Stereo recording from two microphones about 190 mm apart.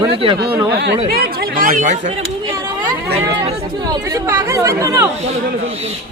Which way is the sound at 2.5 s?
20° right (ahead or behind).